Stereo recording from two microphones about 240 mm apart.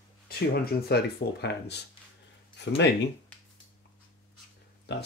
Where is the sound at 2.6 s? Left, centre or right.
Left.